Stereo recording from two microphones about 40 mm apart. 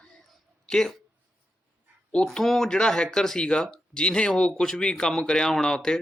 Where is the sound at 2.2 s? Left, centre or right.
Centre.